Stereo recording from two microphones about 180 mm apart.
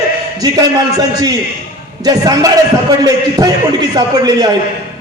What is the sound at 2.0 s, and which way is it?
A man's voice, 20° right (ahead or behind).